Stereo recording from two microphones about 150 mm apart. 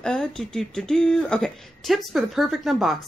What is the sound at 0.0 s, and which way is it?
Speech, 5° left (ahead or behind).